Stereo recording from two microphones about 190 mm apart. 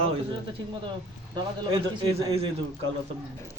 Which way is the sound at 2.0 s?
25° right (ahead or behind).